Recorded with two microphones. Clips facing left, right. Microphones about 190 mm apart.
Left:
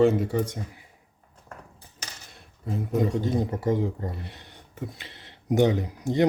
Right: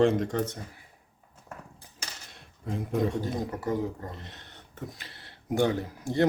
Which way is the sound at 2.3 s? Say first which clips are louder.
Left 2 dB; centre (ahead or behind).